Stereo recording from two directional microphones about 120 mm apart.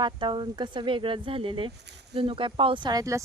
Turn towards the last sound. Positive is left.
turn(degrees=-30)  # may be behind; listen again after turning